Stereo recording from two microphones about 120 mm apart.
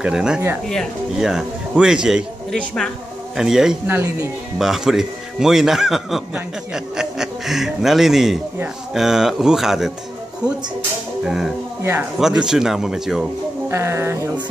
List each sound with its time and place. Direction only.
0.0 s a man's voice: 5° right (ahead or behind)
2.5 s a woman's voice: 5° left (ahead or behind)
3.3 s a man's voice: 5° right (ahead or behind)
3.8 s speech: 15° right (ahead or behind)
4.6 s a man's voice: 5° right (ahead or behind)
12.2 s a man's voice: 5° right (ahead or behind)
13.7 s speech: 20° right (ahead or behind)